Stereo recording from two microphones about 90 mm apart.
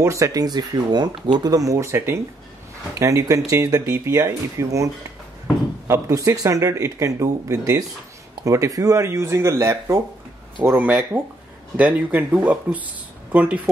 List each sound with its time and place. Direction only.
0.0 s speech: 35° right (ahead or behind)
3.8 s speech: 25° right (ahead or behind)
4.1 s speech: 35° right (ahead or behind)
5.9 s speech: 35° right (ahead or behind)
10.8 s speech: 15° right (ahead or behind)